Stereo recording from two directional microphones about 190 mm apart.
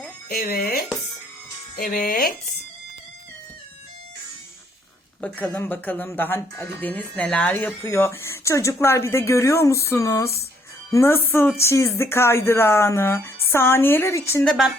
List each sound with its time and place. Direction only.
0.3 s speech: 55° left (ahead or behind)
5.2 s speech: 10° left (ahead or behind)
14.4 s a woman's voice: centre (ahead or behind)